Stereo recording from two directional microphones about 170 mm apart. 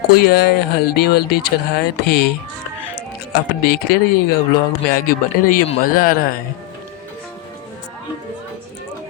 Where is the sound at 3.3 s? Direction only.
65° left (ahead or behind).